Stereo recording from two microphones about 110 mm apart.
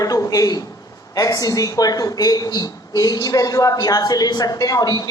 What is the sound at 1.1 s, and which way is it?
Speech, 35° left (ahead or behind).